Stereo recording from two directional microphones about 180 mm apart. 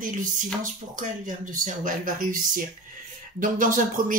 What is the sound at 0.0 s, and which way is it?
Speech, 45° right (ahead or behind).